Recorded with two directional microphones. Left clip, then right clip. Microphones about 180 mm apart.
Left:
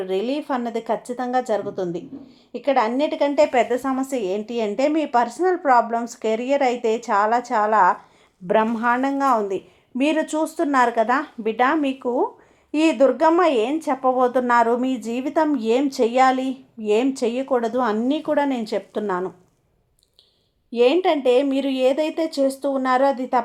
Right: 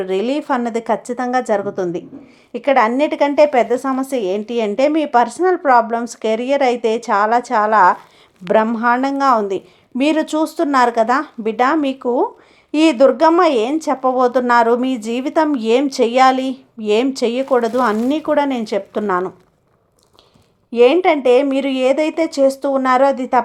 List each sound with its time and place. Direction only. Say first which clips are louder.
0.0 s a woman's voice: right 5 dB; 30° right (ahead or behind)
20.7 s speech: right 6 dB; 25° right (ahead or behind)